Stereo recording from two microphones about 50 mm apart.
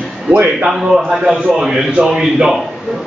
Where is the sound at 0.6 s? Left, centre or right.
Centre.